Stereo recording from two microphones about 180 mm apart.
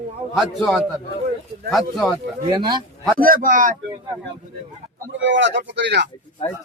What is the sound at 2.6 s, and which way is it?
Speech, 25° right (ahead or behind).